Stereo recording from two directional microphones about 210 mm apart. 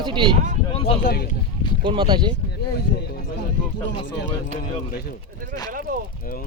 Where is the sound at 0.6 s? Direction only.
25° left (ahead or behind).